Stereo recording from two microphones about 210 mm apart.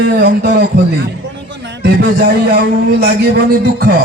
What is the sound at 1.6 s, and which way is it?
A man's voice, 55° right (ahead or behind).